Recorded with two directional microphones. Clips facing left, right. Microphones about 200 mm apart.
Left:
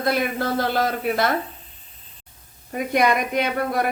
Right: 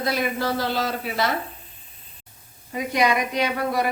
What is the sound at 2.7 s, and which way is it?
A man's voice, 55° left (ahead or behind).